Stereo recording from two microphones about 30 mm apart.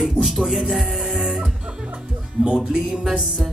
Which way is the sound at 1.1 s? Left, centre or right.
Right.